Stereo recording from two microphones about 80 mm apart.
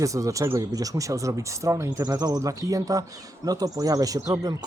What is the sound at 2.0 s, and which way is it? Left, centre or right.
Speech, right.